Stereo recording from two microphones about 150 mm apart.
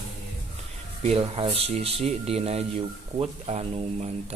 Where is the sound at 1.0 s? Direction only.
40° right (ahead or behind).